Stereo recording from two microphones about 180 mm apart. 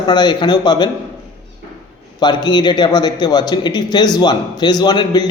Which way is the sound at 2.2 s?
25° left (ahead or behind).